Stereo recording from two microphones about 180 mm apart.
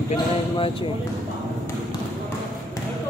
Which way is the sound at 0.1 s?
30° left (ahead or behind).